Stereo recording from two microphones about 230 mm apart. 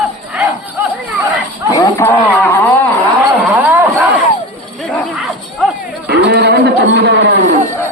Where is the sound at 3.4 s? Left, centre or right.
Centre.